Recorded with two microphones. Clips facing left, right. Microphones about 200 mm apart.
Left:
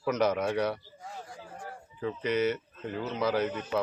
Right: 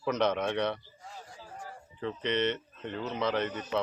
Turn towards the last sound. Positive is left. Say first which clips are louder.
# left 2 dB
turn(degrees=5)  # may be behind; listen again after turning